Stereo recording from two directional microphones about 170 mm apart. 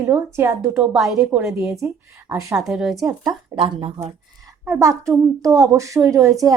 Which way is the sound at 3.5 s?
30° right (ahead or behind).